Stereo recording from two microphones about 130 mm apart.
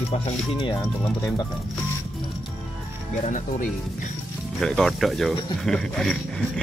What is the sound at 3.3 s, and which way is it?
Speech, 75° left (ahead or behind).